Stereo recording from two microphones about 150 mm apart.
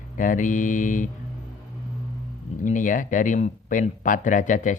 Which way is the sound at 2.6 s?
60° left (ahead or behind).